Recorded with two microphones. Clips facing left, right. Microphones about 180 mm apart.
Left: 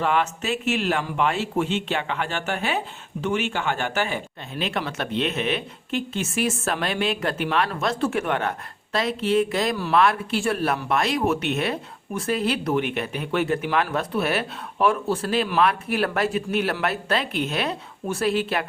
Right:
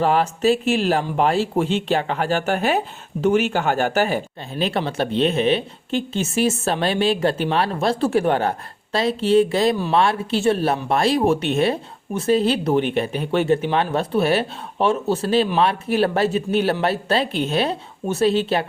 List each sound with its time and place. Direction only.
0.0 s a man's voice: 35° right (ahead or behind)